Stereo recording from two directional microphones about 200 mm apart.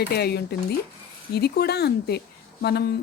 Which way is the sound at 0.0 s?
55° left (ahead or behind).